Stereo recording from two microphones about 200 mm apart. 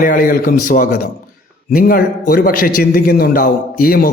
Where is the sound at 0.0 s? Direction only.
40° left (ahead or behind).